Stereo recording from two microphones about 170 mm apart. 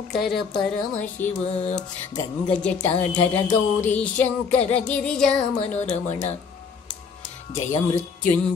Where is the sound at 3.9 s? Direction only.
5° left (ahead or behind).